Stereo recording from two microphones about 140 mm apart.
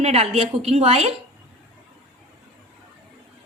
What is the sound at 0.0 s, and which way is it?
A woman's voice, 50° right (ahead or behind).